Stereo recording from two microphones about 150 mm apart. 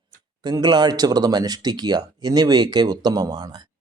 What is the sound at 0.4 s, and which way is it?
Speech, 30° right (ahead or behind).